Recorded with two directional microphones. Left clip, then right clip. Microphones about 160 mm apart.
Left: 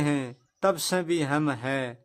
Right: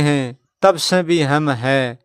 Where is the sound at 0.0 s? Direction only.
40° right (ahead or behind).